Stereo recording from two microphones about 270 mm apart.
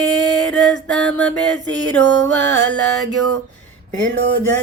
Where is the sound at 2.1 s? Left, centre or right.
Right.